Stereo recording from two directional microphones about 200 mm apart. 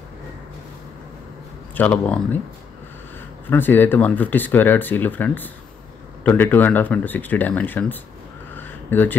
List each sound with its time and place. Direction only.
1.8 s speech: 5° left (ahead or behind)
3.4 s speech: 10° left (ahead or behind)
8.5 s crow: 10° left (ahead or behind)